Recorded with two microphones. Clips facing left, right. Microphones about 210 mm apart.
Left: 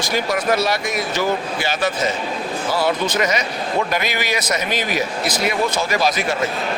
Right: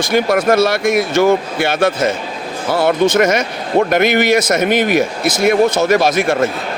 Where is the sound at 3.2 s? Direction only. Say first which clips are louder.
Right 7 dB; 50° right (ahead or behind).